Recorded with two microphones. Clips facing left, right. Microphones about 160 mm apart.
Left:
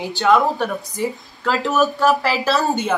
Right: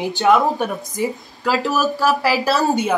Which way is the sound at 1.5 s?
Centre (ahead or behind).